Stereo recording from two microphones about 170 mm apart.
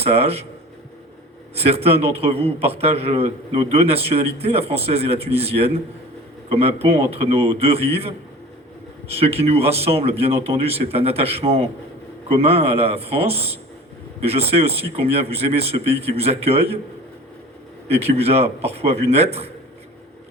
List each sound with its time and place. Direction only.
0.0 s a man's voice: 35° right (ahead or behind)
1.5 s a man's voice: 35° right (ahead or behind)
17.8 s a man's voice: 35° right (ahead or behind)